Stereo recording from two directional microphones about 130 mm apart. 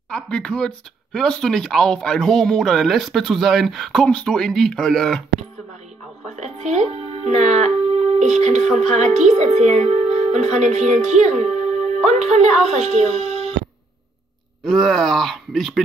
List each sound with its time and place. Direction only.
0.1 s speech: 5° left (ahead or behind)
6.2 s speech: 60° right (ahead or behind)
14.6 s speech: centre (ahead or behind)